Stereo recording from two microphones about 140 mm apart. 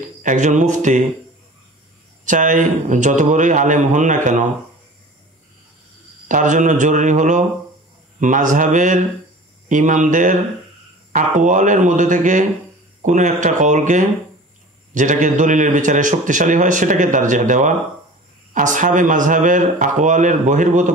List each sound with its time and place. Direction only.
0.2 s a man's voice: 65° right (ahead or behind)
2.2 s a man's voice: 65° right (ahead or behind)
6.2 s a man's voice: 65° right (ahead or behind)